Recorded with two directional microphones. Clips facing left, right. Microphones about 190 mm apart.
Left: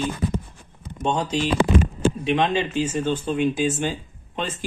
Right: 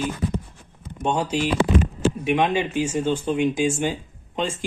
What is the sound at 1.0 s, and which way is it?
Speech, 10° right (ahead or behind).